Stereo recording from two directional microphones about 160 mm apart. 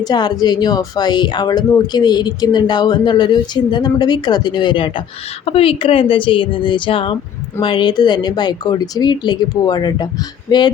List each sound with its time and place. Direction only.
0.0 s a woman's voice: 25° left (ahead or behind)